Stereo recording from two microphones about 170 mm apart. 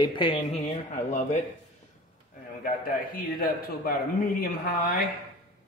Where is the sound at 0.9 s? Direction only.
45° left (ahead or behind).